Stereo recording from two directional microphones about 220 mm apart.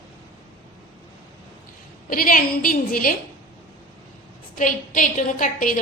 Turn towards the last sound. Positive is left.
turn(degrees=35)  # may be behind; listen again after turning